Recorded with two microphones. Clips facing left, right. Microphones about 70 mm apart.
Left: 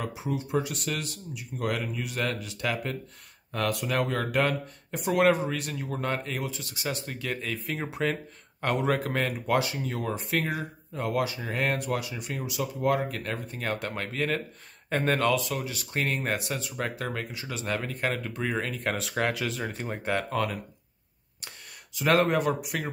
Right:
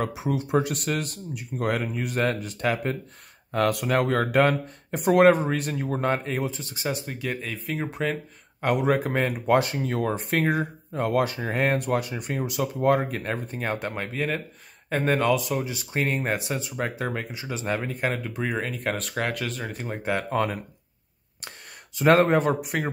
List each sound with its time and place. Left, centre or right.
0.0 s speech: right
3.5 s speech: right
7.1 s speech: centre
9.5 s speech: right
11.5 s speech: right
11.8 s speech: right
13.2 s speech: right
14.0 s speech: centre
15.4 s speech: right; by 20.2 s centre
20.2 s speech: right
21.9 s speech: right